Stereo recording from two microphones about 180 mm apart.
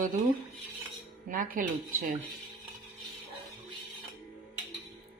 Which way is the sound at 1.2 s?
50° right (ahead or behind).